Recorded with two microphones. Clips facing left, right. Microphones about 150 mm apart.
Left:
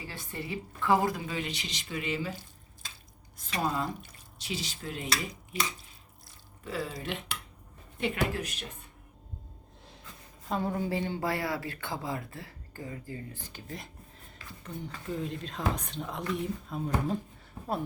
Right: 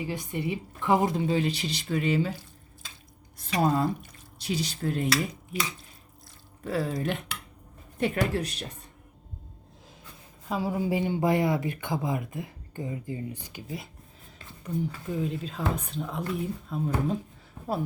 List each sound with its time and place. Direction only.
0.0 s a woman's voice: 15° right (ahead or behind); by 2.3 s 40° right (ahead or behind)
3.5 s a woman's voice: 40° right (ahead or behind)
6.7 s a woman's voice: 45° right (ahead or behind)
10.5 s speech: 5° right (ahead or behind)